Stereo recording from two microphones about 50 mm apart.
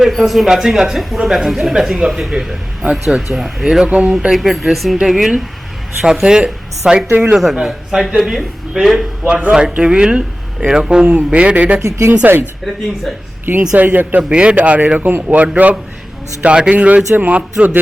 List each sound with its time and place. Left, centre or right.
0.0 s speech: centre
3.8 s speech: right
4.3 s speech: centre
7.1 s speech: right
7.6 s speech: centre
9.5 s speech: centre
11.8 s speech: right
12.2 s a man's voice: right
13.4 s a man's voice: right
14.2 s a man's voice: right
16.4 s a man's voice: right